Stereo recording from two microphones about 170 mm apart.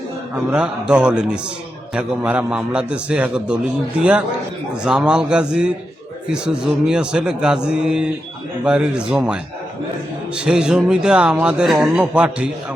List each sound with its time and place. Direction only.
0.5 s a man's voice: 5° right (ahead or behind)
4.8 s speech: 5° right (ahead or behind)